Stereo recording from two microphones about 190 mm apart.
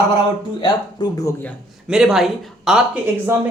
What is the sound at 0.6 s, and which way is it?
Speech, 20° left (ahead or behind).